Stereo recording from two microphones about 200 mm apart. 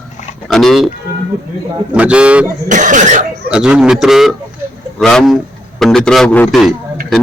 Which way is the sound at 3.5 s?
5° right (ahead or behind).